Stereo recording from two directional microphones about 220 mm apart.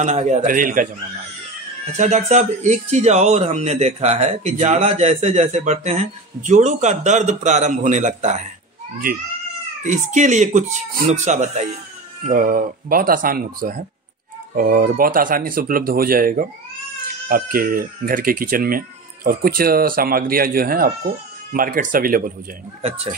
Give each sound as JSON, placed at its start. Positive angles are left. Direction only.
{"t": 0.0, "sound": "speech", "side_deg": -30}
{"t": 2.0, "sound": "speech", "side_deg": -30}
{"t": 9.8, "sound": "speech", "side_deg": -35}